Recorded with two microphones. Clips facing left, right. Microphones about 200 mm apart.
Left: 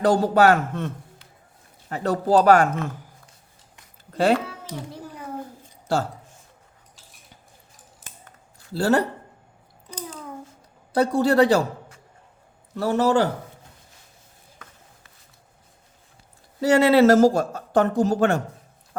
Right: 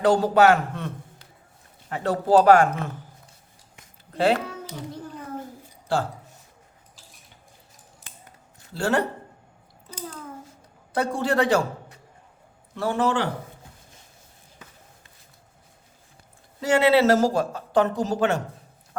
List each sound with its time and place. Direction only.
0.0 s speech: 45° left (ahead or behind)
1.9 s speech: 40° left (ahead or behind)
4.1 s speech: 40° left (ahead or behind)
8.7 s speech: 35° left (ahead or behind)
10.9 s speech: 35° left (ahead or behind)
12.7 s speech: 40° left (ahead or behind)
16.6 s speech: 40° left (ahead or behind)